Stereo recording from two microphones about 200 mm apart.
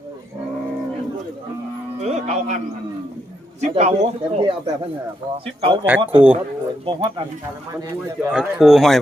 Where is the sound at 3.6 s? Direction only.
35° right (ahead or behind).